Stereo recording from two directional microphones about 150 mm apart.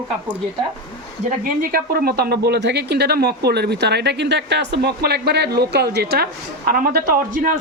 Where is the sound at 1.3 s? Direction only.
80° right.